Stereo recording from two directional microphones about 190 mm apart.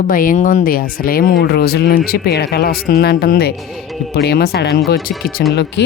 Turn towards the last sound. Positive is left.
turn(degrees=55)  # may be behind; listen again after turning